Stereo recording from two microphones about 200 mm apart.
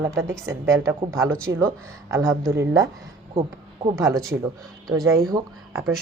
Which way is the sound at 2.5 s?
15° right (ahead or behind).